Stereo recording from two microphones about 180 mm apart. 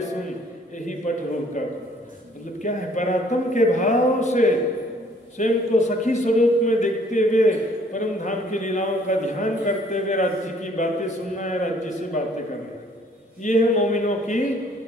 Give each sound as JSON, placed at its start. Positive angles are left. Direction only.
{"t": 1.1, "sound": "a man's voice", "side_deg": 45}
{"t": 2.6, "sound": "a man's voice", "side_deg": 45}
{"t": 13.4, "sound": "a man's voice", "side_deg": 45}